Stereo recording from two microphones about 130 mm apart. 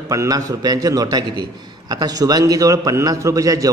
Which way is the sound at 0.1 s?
25° right (ahead or behind).